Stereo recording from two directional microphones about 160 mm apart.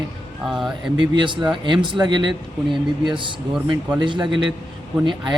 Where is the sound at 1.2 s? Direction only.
30° right (ahead or behind).